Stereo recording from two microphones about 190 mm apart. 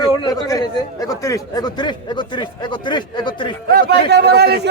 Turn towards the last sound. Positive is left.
turn(degrees=-60)  # may be behind; listen again after turning